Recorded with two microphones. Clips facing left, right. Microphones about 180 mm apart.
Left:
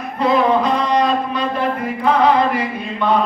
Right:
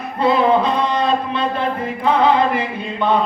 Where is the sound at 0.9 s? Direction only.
25° right (ahead or behind).